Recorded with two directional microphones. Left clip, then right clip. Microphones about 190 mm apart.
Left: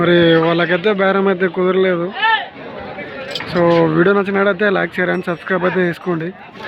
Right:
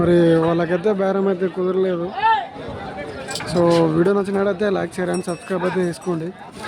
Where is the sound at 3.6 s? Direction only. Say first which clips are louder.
Left 4 dB; centre (ahead or behind).